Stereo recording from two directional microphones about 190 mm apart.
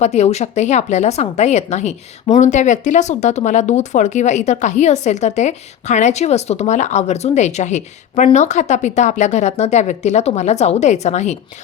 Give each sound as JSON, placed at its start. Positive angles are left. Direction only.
{"t": 0.0, "sound": "speech", "side_deg": 35}